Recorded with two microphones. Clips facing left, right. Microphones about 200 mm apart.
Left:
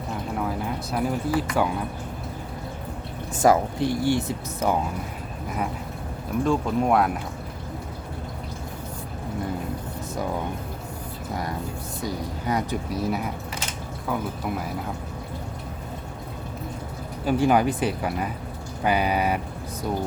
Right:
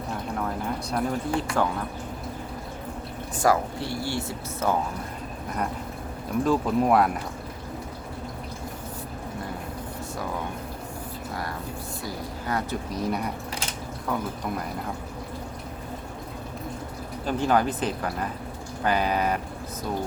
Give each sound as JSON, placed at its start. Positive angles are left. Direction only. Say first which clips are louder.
{"t": 0.1, "sound": "a sound", "louder": "left 2 dB", "side_deg": 5}
{"t": 3.3, "sound": "speech", "louder": "left 4 dB", "side_deg": 20}
{"t": 5.5, "sound": "speech", "louder": "left 1 dB", "side_deg": 5}
{"t": 12.0, "sound": "a sound", "louder": "left 5 dB", "side_deg": 15}
{"t": 12.9, "sound": "speech", "louder": "right 1 dB", "side_deg": 5}
{"t": 17.2, "sound": "speech", "louder": "left 3 dB", "side_deg": 10}